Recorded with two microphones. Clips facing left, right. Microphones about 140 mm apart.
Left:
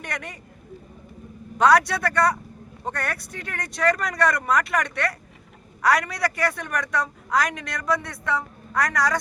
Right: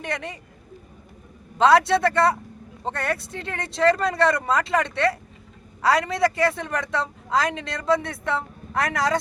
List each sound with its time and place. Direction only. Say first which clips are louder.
0.0 s a woman's voice: right 4 dB; 25° right (ahead or behind)
1.5 s a woman's voice: right 2 dB; 25° right (ahead or behind)